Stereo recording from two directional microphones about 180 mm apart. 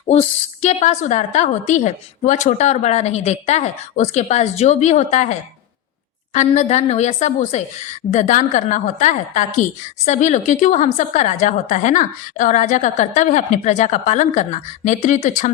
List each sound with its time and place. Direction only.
0.1 s a woman's voice: 35° left (ahead or behind)